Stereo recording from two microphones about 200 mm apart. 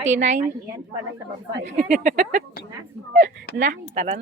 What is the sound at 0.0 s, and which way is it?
Speech, 35° right (ahead or behind).